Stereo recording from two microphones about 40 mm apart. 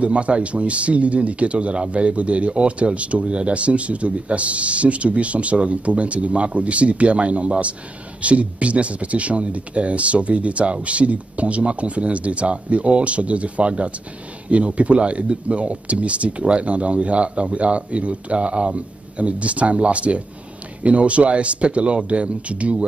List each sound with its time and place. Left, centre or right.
0.0 s speech: right